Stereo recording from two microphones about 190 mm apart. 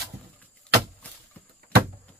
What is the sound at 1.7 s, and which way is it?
Door, 60° right (ahead or behind).